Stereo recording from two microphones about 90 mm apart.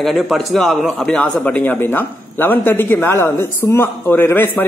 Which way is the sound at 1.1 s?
15° left (ahead or behind).